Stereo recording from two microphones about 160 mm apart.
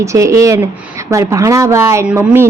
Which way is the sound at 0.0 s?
20° right (ahead or behind).